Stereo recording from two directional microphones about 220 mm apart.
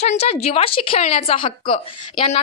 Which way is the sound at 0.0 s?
30° left (ahead or behind).